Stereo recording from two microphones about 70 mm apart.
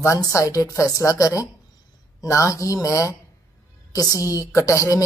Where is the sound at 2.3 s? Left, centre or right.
Left.